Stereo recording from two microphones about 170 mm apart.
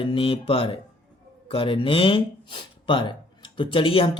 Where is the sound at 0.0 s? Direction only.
30° left (ahead or behind).